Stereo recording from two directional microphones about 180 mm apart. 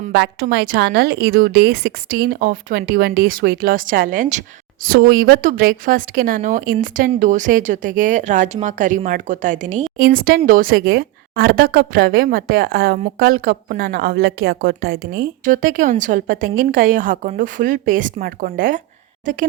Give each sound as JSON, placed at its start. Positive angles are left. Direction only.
{"t": 0.1, "sound": "a woman's voice", "side_deg": -75}
{"t": 4.9, "sound": "speech", "side_deg": -55}
{"t": 10.0, "sound": "speech", "side_deg": -55}